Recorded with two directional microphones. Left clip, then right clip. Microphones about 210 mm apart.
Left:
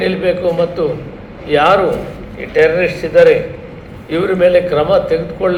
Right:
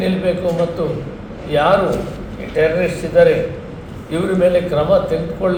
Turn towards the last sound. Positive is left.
turn(degrees=45)  # may be behind; listen again after turning